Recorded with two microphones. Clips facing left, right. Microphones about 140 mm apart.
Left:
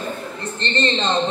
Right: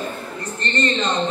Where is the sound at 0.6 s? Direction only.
25° left (ahead or behind).